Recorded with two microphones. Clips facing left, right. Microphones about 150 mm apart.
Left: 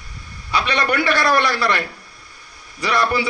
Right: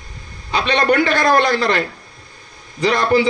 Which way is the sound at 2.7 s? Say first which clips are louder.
Right 4 dB; 25° right (ahead or behind).